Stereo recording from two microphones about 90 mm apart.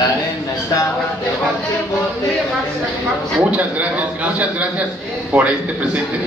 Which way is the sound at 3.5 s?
15° right (ahead or behind).